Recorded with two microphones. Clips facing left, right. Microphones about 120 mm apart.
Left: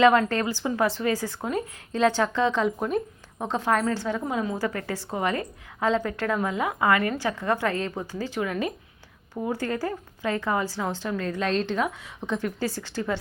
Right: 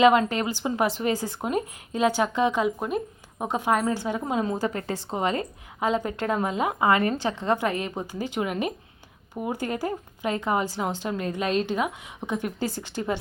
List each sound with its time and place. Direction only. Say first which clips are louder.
0.0 s a woman's voice: even; 15° right (ahead or behind)